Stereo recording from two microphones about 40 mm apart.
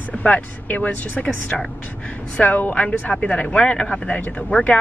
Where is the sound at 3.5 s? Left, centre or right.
Left.